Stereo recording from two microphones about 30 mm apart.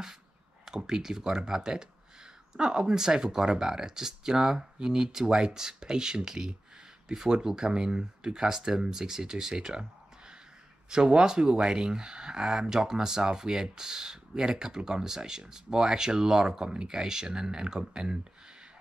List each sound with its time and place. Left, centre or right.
0.7 s speech: centre
10.9 s speech: right